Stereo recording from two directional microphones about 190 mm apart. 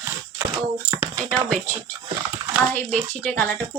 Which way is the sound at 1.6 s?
15° right (ahead or behind).